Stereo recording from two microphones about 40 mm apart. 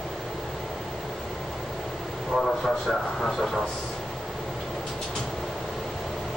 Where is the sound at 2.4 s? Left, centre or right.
Centre.